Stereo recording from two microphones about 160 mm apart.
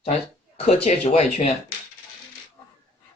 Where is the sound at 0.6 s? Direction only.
45° left (ahead or behind).